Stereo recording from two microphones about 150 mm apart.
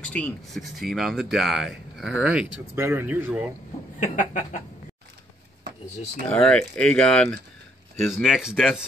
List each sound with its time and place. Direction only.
0.0 s speech: 10° left (ahead or behind); by 3.5 s 15° right (ahead or behind)
4.0 s chicken: 55° left (ahead or behind)
6.3 s speech: 5° left (ahead or behind)